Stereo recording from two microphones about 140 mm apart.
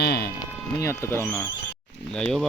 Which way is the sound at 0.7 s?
20° left (ahead or behind).